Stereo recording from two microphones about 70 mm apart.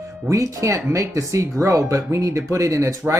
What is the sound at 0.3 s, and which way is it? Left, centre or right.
Speech, right.